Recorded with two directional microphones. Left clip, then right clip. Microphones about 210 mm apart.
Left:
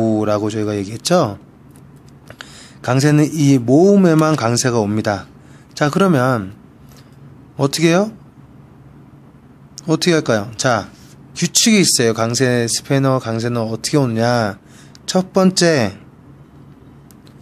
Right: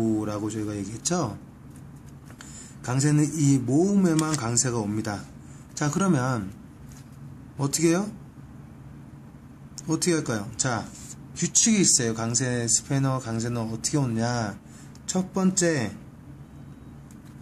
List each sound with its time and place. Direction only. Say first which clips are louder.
0.0 s a man's voice: left 11 dB; 45° left (ahead or behind)
2.3 s a man's voice: left 10 dB; 45° left (ahead or behind)
7.5 s a man's voice: left 10 dB; 45° left (ahead or behind)
9.8 s a man's voice: left 11 dB; 40° left (ahead or behind)